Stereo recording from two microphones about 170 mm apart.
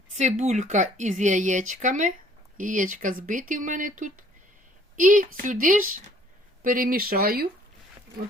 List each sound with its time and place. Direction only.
0.2 s speech: 40° right (ahead or behind); by 7.4 s 65° right (ahead or behind)